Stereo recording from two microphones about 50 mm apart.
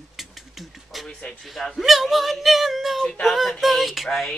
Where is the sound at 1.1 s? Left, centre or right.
Centre.